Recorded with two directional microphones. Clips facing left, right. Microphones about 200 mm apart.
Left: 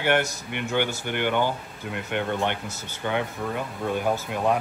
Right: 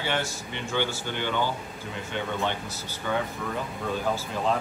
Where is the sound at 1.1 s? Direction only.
60° left (ahead or behind).